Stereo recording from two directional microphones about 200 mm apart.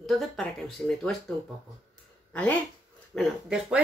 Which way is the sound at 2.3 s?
5° left (ahead or behind).